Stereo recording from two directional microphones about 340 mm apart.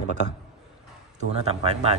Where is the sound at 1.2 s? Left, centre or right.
Centre.